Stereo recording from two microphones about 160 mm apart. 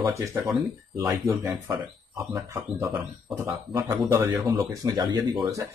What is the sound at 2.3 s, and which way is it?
Speech, 15° right (ahead or behind).